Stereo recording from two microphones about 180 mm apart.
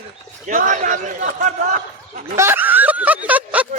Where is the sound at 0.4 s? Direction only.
45° right (ahead or behind).